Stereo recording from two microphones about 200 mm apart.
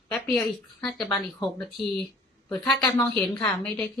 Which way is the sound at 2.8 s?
10° left (ahead or behind).